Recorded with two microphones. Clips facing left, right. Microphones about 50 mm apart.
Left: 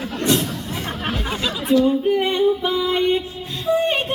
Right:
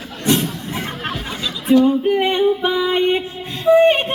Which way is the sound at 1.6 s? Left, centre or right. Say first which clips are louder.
Right 3 dB; right.